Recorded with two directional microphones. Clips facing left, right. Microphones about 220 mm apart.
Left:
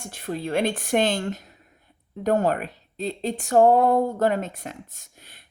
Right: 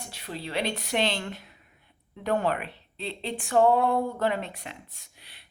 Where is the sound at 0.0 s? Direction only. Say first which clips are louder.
Left 7 dB; 50° left (ahead or behind).